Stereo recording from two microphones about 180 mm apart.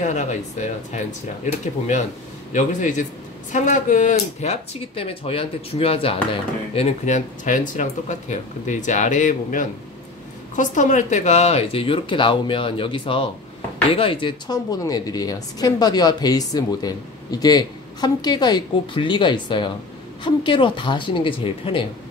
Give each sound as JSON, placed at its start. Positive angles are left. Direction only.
{"t": 0.0, "sound": "a woman's voice", "side_deg": 40}